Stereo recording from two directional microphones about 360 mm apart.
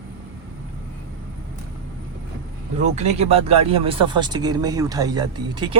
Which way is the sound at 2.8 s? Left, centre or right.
Centre.